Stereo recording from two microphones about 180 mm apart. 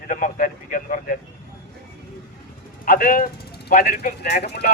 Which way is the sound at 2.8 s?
50° left (ahead or behind).